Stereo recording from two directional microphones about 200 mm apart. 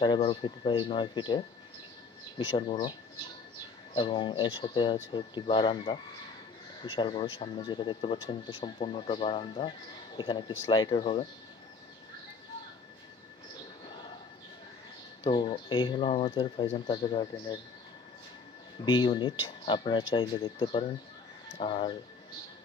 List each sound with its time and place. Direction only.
0.0 s speech: 25° left (ahead or behind)
3.9 s speech: 25° left (ahead or behind)
15.2 s speech: 25° left (ahead or behind)
18.9 s speech: 25° left (ahead or behind)